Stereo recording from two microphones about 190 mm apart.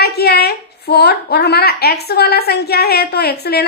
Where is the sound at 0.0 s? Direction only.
55° left (ahead or behind).